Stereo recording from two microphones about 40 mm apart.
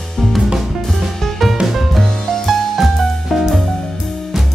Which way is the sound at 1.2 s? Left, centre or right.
Centre.